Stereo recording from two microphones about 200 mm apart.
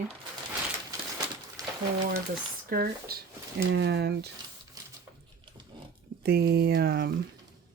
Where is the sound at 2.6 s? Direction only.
50° right (ahead or behind).